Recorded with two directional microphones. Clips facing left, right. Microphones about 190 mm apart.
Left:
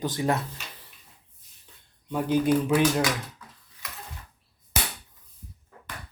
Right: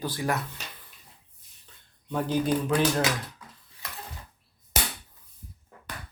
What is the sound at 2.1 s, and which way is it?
Speech, 10° left (ahead or behind).